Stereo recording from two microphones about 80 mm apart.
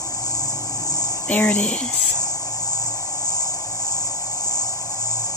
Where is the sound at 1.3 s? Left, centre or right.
Centre.